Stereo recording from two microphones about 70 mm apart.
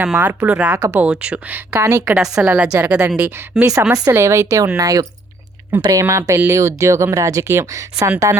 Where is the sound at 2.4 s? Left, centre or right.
Right.